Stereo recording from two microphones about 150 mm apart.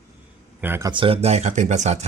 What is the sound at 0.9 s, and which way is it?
Speech, 35° right (ahead or behind).